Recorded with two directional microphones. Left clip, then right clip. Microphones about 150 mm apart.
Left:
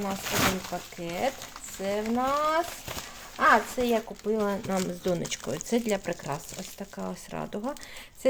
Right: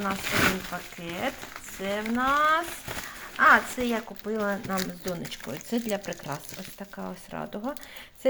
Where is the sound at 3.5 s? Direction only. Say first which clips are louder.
Even; 45° left (ahead or behind).